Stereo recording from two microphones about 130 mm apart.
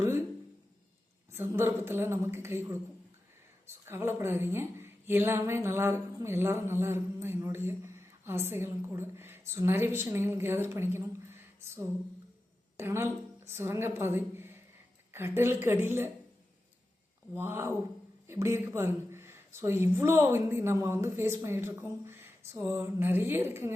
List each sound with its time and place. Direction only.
1.3 s a woman's voice: 20° right (ahead or behind)
17.3 s a woman's voice: 15° right (ahead or behind)